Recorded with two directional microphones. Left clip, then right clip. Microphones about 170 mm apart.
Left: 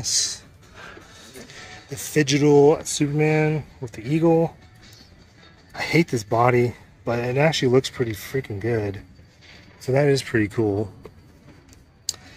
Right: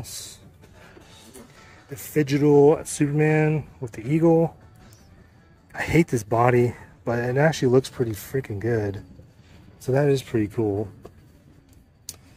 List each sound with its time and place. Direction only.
0.0 s a sound: 5° right (ahead or behind)
2.1 s speech: 10° right (ahead or behind)
5.7 s speech: 20° right (ahead or behind)